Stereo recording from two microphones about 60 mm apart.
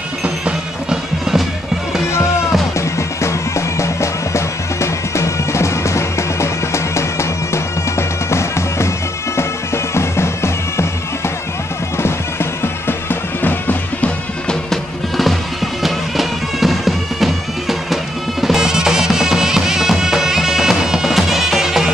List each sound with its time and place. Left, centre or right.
0.2 s music: centre
2.8 s music: left
8.3 s bagpipes: left
9.9 s bagpipes: left
12.0 s music: left
15.8 s bagpipes: centre
18.4 s music: centre